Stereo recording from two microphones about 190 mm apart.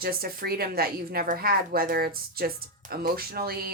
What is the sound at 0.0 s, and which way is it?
Speech, 50° right (ahead or behind).